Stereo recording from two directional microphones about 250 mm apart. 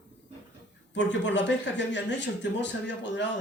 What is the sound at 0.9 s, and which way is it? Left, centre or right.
Speech, left.